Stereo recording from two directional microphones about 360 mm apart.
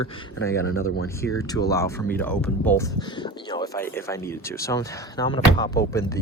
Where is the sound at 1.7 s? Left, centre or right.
Centre.